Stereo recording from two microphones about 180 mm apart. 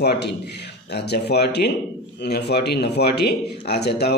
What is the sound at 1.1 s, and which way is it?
Speech, 65° left (ahead or behind).